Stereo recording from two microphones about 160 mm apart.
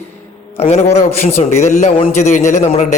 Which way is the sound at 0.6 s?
40° left (ahead or behind).